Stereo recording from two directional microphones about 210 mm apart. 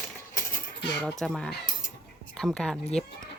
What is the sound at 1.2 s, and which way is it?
Speech, 5° left (ahead or behind).